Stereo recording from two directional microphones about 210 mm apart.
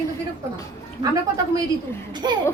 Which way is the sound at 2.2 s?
20° right (ahead or behind).